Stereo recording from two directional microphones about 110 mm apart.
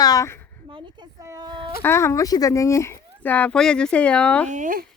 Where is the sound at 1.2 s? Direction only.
30° right (ahead or behind).